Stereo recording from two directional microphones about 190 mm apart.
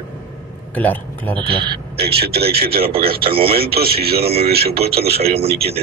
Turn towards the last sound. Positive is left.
turn(degrees=-30)  # may be behind; listen again after turning